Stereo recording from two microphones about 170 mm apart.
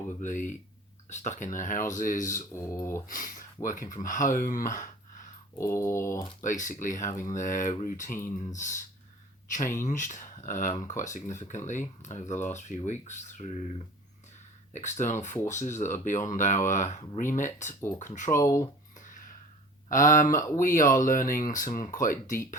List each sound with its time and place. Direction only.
0.2 s speech: 45° left (ahead or behind)
2.5 s mantra: 15° left (ahead or behind)
3.1 s speech: 55° left (ahead or behind)
5.5 s mantra: 15° left (ahead or behind)
6.4 s speech: 50° left (ahead or behind)
7.0 s mantra: 15° left (ahead or behind)
7.3 s speech: 50° left (ahead or behind)
17.7 s mantra: 15° left (ahead or behind)
18.0 s speech: 45° left (ahead or behind)
18.3 s mantra: 20° left (ahead or behind)
18.9 s a sound: 50° left (ahead or behind)
19.9 s speech: 50° left (ahead or behind)